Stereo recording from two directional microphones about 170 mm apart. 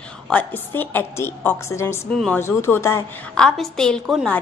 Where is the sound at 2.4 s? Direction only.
15° left (ahead or behind).